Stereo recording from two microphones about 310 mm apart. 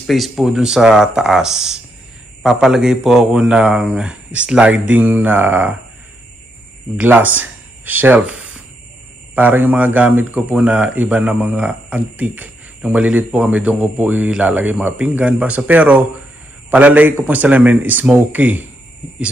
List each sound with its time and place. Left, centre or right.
0.0 s speech: centre
7.0 s speech: centre